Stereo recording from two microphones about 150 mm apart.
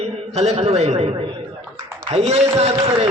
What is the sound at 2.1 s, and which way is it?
Speech, 45° right (ahead or behind).